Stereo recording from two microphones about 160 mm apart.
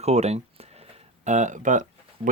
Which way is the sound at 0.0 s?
40° right (ahead or behind).